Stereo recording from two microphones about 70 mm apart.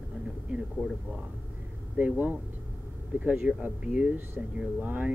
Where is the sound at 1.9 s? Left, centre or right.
Right.